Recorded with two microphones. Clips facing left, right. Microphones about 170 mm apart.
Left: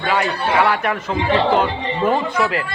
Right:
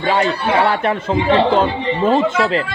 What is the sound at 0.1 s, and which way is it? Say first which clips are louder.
Speech: right 3 dB; 30° right (ahead or behind).